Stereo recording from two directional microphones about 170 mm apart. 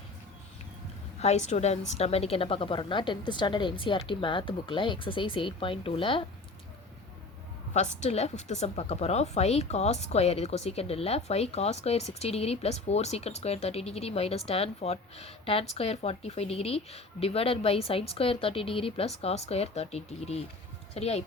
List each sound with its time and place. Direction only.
1.2 s a woman's voice: 40° left (ahead or behind)
7.7 s a woman's voice: 40° left (ahead or behind)